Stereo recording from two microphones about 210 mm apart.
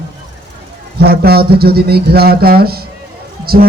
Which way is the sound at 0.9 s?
50° right (ahead or behind).